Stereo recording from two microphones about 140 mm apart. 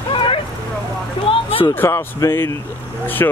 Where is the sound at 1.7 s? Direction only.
15° left (ahead or behind).